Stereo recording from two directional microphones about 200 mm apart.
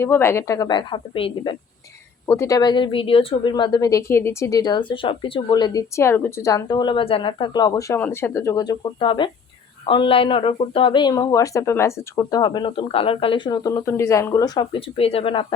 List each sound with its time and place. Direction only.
0.0 s a woman's voice: 10° left (ahead or behind)
2.2 s speech: 15° left (ahead or behind)